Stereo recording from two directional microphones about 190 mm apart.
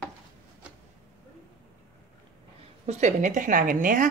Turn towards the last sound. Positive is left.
turn(degrees=-45)  # may be behind; listen again after turning